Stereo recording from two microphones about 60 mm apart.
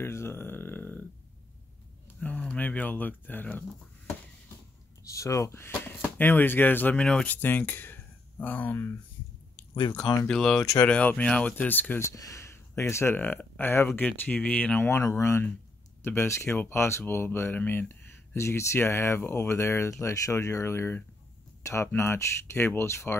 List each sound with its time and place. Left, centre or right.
0.0 s speech: left
2.1 s speech: centre
5.0 s speech: left
7.0 s speech: centre
7.2 s speech: left
10.2 s speech: centre
10.6 s speech: left
10.9 s speech: left
11.5 s speech: left
12.2 s speech: left
13.9 s speech: left
14.9 s speech: left
18.3 s speech: left